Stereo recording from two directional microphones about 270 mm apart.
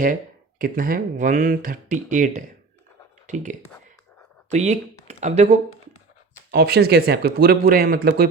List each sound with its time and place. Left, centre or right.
0.6 s speech: right
4.5 s speech: right
6.5 s speech: right